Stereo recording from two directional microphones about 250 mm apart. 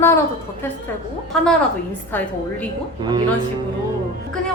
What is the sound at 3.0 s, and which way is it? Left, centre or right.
Speech, centre.